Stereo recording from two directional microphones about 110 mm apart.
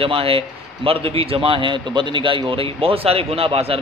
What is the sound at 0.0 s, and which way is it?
Speech, 55° right (ahead or behind).